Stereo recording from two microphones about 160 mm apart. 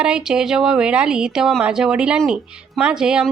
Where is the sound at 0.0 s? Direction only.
5° right (ahead or behind).